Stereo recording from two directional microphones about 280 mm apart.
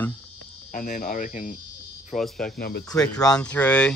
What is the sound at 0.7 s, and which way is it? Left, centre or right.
Speech, left.